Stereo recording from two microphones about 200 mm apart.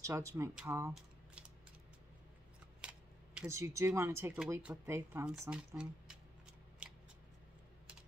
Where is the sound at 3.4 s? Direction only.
15° right (ahead or behind).